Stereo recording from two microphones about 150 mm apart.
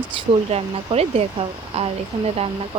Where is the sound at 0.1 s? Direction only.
40° right (ahead or behind).